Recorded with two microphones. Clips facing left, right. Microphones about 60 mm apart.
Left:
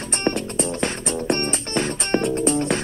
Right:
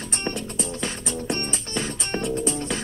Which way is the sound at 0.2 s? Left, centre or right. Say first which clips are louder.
Left 7 dB; left.